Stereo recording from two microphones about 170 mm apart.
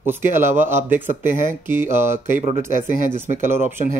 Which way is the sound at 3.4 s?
15° right (ahead or behind).